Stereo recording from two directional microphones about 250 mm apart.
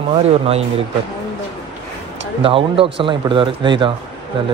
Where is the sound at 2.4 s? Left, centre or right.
Right.